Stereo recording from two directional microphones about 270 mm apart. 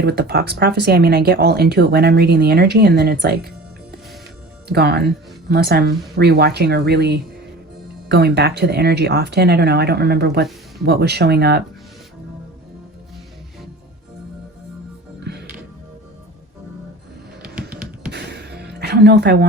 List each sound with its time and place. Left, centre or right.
0.0 s speech: right
4.7 s speech: right
17.4 s music: centre
18.1 s a sound: right